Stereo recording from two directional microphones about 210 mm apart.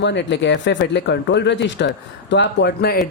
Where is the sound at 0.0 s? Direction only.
55° left (ahead or behind).